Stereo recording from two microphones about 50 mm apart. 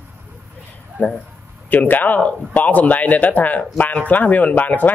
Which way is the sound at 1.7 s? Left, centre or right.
Left.